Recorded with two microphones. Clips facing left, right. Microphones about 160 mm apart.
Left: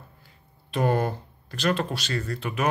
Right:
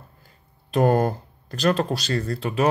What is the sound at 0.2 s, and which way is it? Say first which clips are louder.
Speech: even; 45° right (ahead or behind).